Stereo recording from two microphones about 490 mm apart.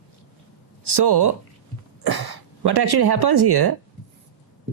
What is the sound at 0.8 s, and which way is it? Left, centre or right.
Speech, right.